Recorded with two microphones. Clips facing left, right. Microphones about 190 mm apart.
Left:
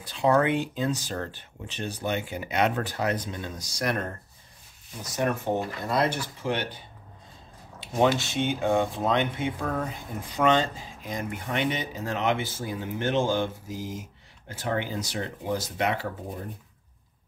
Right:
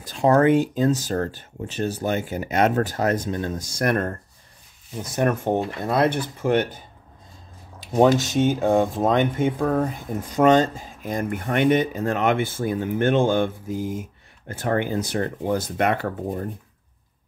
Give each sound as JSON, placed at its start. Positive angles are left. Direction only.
{"t": 0.0, "sound": "speech", "side_deg": -45}
{"t": 7.9, "sound": "speech", "side_deg": -40}